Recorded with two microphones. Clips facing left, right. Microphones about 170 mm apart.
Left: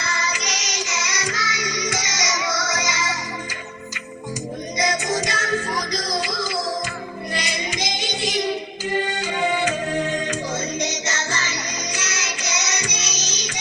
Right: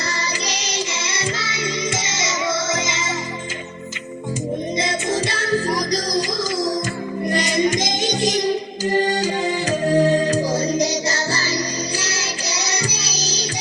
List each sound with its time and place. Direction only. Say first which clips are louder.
0.1 s music: right 1 dB; 30° right (ahead or behind)
4.8 s music: left 3 dB; 25° right (ahead or behind)
7.3 s music: right 10 dB; 45° right (ahead or behind)